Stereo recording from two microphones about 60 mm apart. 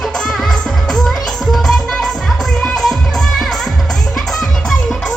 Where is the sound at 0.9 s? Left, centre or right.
Centre.